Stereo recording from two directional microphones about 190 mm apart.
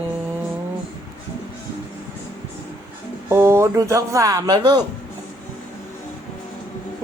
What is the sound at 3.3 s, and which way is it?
Speech, 15° right (ahead or behind).